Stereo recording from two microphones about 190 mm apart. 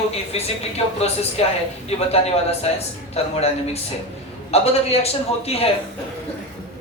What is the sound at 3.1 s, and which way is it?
A man's voice, 35° left (ahead or behind).